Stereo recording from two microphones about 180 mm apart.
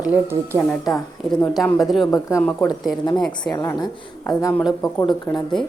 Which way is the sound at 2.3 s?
5° left (ahead or behind).